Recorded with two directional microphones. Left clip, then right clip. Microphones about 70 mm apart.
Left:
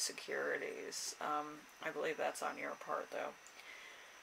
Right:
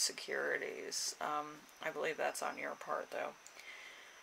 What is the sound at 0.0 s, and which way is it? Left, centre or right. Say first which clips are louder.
Speech: right 2 dB; right.